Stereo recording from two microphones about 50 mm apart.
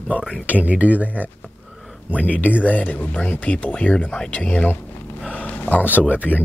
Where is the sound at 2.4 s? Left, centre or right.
Left.